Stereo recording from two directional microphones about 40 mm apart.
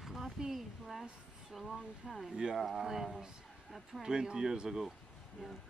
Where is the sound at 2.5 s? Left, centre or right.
Centre.